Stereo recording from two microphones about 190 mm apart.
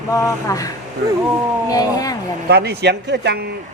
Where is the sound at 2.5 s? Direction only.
60° right (ahead or behind).